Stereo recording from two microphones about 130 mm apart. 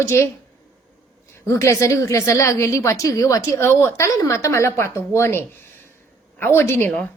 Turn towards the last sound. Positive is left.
turn(degrees=20)  # may be behind; listen again after turning